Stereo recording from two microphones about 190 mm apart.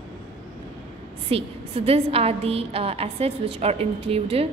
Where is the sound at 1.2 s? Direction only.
30° right (ahead or behind).